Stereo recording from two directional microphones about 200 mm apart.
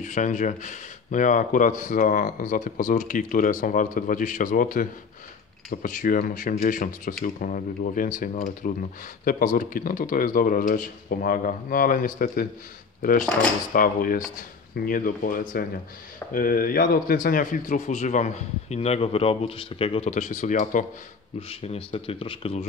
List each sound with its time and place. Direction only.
0.0 s speech: 40° left (ahead or behind)
13.7 s speech: 45° left (ahead or behind)
21.4 s speech: 30° left (ahead or behind)